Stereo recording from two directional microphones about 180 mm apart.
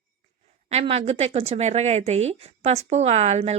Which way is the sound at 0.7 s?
35° right (ahead or behind).